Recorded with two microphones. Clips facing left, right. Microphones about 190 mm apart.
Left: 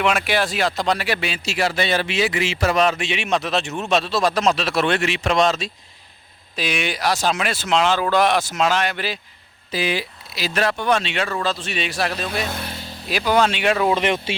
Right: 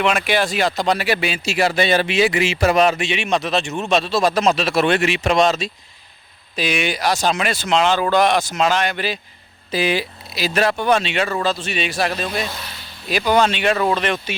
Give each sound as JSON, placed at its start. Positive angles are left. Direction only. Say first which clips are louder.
{"t": 0.0, "sound": "speech", "louder": "right 2 dB", "side_deg": 5}
{"t": 3.0, "sound": "a man's voice", "louder": "right 2 dB", "side_deg": 5}
{"t": 9.7, "sound": "a man's voice", "louder": "right 3 dB", "side_deg": -20}
{"t": 12.5, "sound": "a sound", "louder": "left 4 dB", "side_deg": 50}
{"t": 13.1, "sound": "a man's voice", "louder": "right 2 dB", "side_deg": 5}
{"t": 13.9, "sound": "speech", "louder": "left 1 dB", "side_deg": 20}